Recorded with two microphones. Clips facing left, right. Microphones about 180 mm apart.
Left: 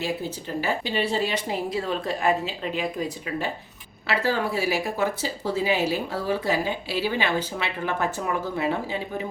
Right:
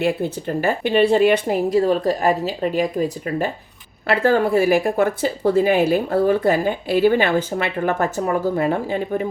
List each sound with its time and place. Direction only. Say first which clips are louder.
0.0 s speech: right 8 dB; 55° right (ahead or behind)